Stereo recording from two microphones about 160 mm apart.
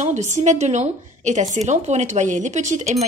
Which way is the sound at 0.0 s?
45° right (ahead or behind).